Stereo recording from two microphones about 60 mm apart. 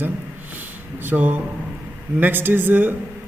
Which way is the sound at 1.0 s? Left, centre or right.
Right.